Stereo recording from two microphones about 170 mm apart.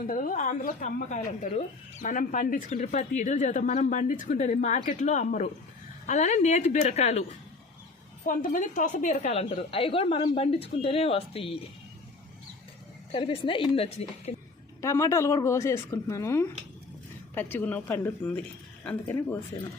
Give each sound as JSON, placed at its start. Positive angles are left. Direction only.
{"t": 0.1, "sound": "speech", "side_deg": 50}
{"t": 8.3, "sound": "a woman's voice", "side_deg": 50}
{"t": 13.1, "sound": "a woman's voice", "side_deg": 30}
{"t": 14.8, "sound": "speech", "side_deg": 15}